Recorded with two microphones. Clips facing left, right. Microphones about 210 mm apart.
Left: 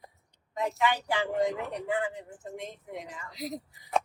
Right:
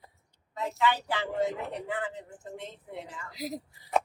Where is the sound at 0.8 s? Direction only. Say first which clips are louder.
Right 1 dB; 15° left (ahead or behind).